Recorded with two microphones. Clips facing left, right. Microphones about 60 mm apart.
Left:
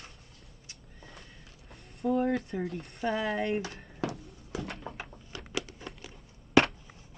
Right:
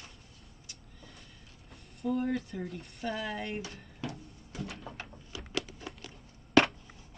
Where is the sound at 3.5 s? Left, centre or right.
Left.